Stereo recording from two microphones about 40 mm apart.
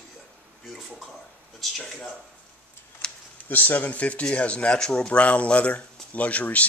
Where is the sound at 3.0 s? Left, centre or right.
Left.